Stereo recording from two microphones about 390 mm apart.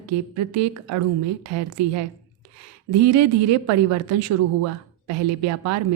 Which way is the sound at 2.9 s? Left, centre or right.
Right.